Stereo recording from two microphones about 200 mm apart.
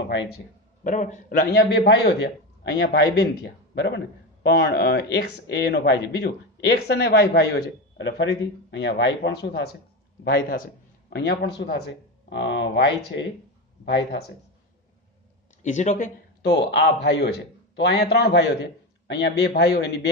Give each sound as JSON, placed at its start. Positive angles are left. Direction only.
{"t": 0.8, "sound": "a man's voice", "side_deg": 40}
{"t": 13.8, "sound": "speech", "side_deg": 60}
{"t": 15.6, "sound": "speech", "side_deg": 35}
{"t": 16.4, "sound": "speech", "side_deg": 55}